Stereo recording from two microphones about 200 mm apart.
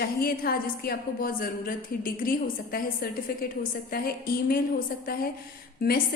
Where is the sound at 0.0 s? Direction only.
50° left (ahead or behind).